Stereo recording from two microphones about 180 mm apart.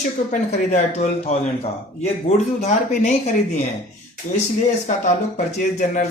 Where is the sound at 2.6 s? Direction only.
40° left (ahead or behind).